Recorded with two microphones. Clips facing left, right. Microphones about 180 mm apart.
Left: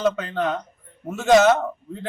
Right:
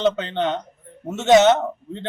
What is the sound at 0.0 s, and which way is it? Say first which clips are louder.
A man's voice: right 2 dB; 25° right (ahead or behind).